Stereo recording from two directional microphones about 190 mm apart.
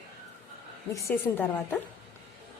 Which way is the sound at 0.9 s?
15° left (ahead or behind).